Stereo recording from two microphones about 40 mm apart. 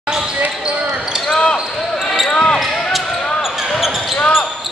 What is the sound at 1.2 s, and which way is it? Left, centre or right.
Basketball bounce, centre.